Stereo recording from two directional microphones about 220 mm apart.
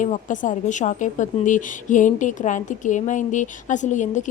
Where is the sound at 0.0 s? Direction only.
35° left (ahead or behind).